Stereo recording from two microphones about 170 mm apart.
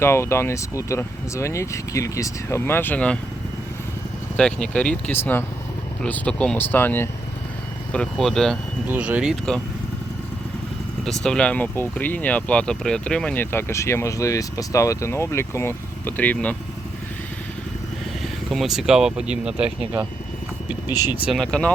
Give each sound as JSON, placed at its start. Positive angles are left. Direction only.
{"t": 0.0, "sound": "speech", "side_deg": 15}
{"t": 4.4, "sound": "speech", "side_deg": 5}
{"t": 8.9, "sound": "speech", "side_deg": -10}
{"t": 11.0, "sound": "speech", "side_deg": 5}
{"t": 18.5, "sound": "speech", "side_deg": 0}
{"t": 21.3, "sound": "speech", "side_deg": 5}